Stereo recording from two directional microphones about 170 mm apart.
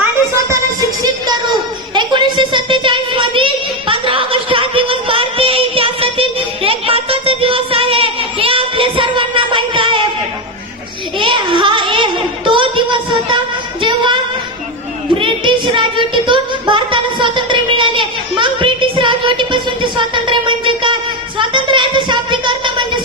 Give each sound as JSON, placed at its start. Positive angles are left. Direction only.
{"t": 0.0, "sound": "music", "side_deg": -15}
{"t": 2.0, "sound": "child singing", "side_deg": -25}
{"t": 11.2, "sound": "child singing", "side_deg": -30}
{"t": 13.8, "sound": "singing", "side_deg": -30}
{"t": 15.2, "sound": "child singing", "side_deg": -30}